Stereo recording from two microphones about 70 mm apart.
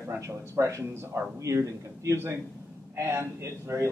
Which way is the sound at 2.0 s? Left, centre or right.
Right.